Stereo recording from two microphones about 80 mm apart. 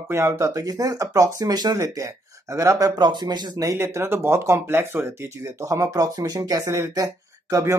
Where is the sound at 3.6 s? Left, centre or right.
Right.